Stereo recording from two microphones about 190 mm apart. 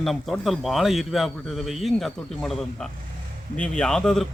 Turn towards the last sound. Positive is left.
turn(degrees=5)  # may be behind; listen again after turning